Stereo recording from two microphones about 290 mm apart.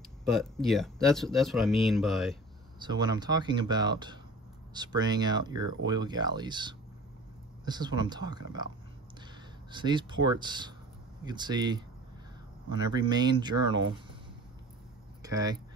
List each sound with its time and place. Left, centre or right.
0.4 s speech: centre
2.8 s speech: centre
9.7 s speech: centre
12.9 s speech: centre
15.2 s speech: centre